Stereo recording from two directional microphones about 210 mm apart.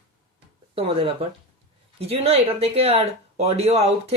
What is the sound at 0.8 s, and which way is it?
Speech, 25° right (ahead or behind).